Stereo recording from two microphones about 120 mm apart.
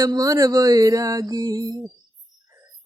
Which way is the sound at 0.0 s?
30° right (ahead or behind).